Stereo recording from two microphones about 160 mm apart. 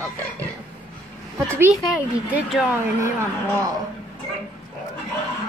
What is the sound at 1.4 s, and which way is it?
A man's voice, 15° right (ahead or behind).